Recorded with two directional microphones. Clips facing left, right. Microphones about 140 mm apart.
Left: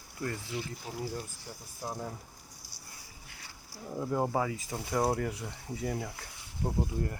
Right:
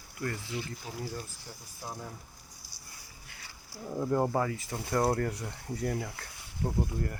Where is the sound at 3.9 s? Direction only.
Centre (ahead or behind).